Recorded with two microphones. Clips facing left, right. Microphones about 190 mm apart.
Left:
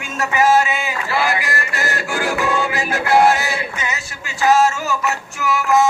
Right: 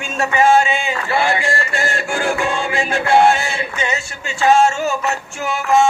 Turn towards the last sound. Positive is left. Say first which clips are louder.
# right 1 dB
turn(degrees=-25)  # may be behind; listen again after turning